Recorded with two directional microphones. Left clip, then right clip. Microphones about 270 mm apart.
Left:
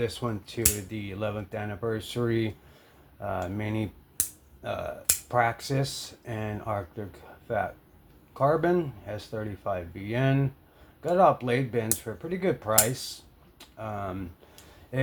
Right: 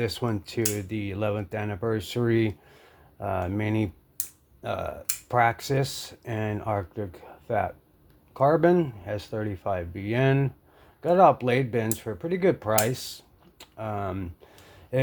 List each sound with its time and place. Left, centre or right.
0.0 s speech: right